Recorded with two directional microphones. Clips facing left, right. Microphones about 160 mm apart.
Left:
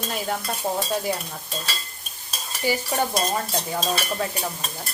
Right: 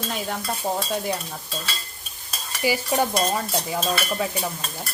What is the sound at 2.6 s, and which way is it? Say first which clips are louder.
Stir: right 2 dB; 10° right (ahead or behind).